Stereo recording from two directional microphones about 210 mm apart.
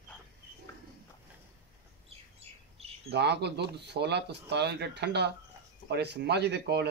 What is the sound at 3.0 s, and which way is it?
Speech, 50° right (ahead or behind).